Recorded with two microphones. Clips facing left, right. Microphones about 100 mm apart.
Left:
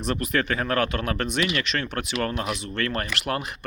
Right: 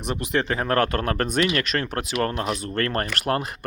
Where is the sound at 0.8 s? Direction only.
45° right (ahead or behind).